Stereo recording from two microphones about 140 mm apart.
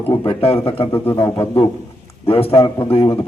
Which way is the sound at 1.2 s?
40° left (ahead or behind).